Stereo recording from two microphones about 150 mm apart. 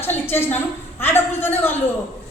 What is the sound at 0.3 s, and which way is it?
A woman's voice, 15° left (ahead or behind).